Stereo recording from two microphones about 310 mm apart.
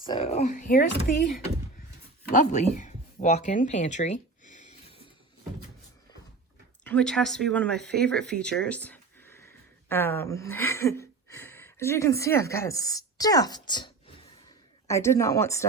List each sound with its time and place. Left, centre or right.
0.0 s speech: centre
2.2 s a sound: left
6.8 s a woman's voice: centre